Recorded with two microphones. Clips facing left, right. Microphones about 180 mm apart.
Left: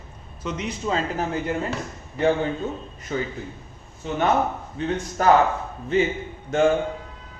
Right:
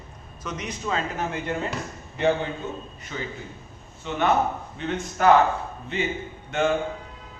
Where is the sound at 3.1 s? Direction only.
40° left (ahead or behind).